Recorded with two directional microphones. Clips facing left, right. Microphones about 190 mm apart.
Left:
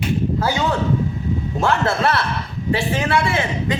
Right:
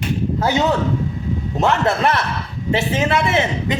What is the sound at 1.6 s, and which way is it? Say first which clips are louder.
A man's voice: right 2 dB; 20° right (ahead or behind).